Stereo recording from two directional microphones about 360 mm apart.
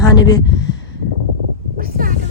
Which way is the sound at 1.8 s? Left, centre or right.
Right.